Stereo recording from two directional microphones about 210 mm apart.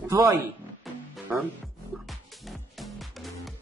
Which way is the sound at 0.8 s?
10° right (ahead or behind).